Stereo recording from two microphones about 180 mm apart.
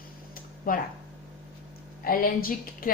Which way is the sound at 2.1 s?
55° left (ahead or behind).